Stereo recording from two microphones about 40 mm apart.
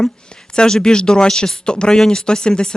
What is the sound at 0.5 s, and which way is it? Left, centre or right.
Speech, left.